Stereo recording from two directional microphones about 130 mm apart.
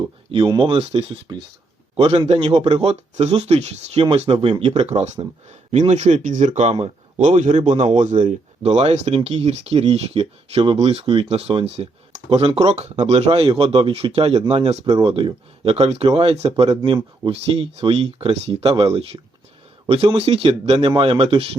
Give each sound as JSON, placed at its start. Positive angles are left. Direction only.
{"t": 0.3, "sound": "speech", "side_deg": -40}
{"t": 8.6, "sound": "speech", "side_deg": -55}